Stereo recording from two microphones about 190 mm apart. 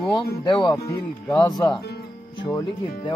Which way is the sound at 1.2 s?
20° left (ahead or behind).